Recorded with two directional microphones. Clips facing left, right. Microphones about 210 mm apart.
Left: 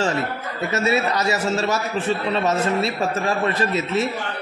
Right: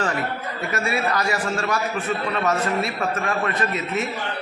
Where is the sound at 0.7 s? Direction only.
20° left (ahead or behind).